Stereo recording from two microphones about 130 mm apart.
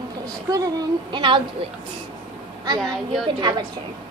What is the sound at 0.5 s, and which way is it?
Speech, 35° right (ahead or behind).